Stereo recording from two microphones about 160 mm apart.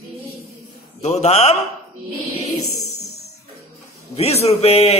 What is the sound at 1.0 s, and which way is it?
Speech, 45° left (ahead or behind).